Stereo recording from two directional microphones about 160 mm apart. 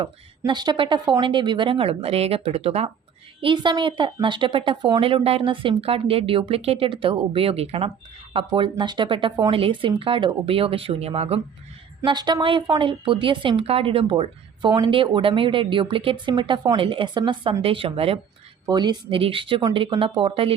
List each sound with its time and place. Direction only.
0.0 s a woman's voice: 30° right (ahead or behind)
12.0 s a woman's voice: 25° right (ahead or behind)
18.6 s a woman's voice: 25° right (ahead or behind)